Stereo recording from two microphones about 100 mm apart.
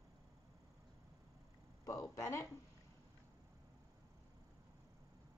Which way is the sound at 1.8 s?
30° left (ahead or behind).